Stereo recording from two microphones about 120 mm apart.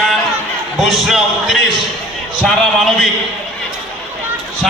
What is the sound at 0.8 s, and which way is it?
A man's voice, centre (ahead or behind).